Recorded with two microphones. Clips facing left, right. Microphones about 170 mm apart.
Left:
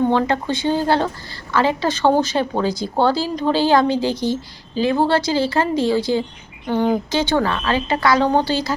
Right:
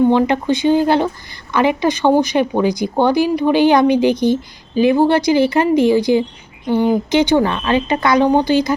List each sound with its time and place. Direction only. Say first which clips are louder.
0.1 s a woman's voice: right 4 dB; 15° right (ahead or behind)